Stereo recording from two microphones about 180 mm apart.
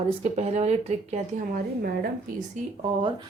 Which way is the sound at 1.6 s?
55° right (ahead or behind).